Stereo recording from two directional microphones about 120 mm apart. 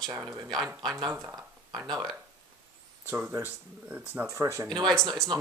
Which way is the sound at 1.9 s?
35° right (ahead or behind).